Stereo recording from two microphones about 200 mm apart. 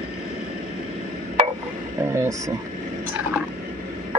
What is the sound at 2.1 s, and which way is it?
Speech, 15° right (ahead or behind).